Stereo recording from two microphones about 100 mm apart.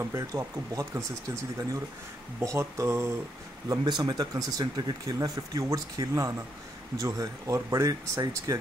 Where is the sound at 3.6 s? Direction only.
45° right (ahead or behind).